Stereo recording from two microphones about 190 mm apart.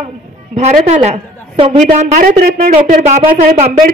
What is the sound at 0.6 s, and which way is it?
A woman's voice, 35° right (ahead or behind).